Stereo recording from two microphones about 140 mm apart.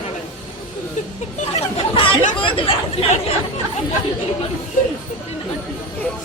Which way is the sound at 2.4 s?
40° left (ahead or behind).